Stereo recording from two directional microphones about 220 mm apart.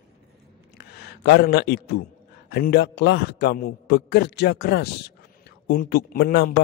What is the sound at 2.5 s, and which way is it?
A man's voice, 45° left (ahead or behind).